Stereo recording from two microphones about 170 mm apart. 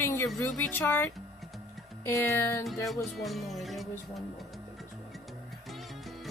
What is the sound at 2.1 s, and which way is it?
Speech, 15° left (ahead or behind).